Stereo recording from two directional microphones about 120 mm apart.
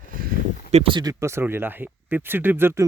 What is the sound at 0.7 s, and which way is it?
Speech, 55° right (ahead or behind).